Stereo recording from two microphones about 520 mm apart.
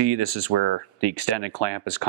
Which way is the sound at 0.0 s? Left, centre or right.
Right.